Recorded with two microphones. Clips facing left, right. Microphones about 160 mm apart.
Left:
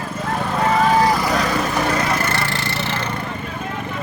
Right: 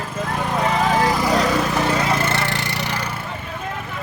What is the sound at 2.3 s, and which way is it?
Splinter, 20° right (ahead or behind).